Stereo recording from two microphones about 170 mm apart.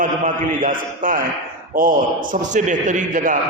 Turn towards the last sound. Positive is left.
turn(degrees=-45)  # may be behind; listen again after turning